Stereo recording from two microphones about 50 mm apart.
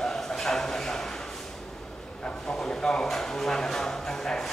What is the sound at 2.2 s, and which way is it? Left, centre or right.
Vehicle, centre.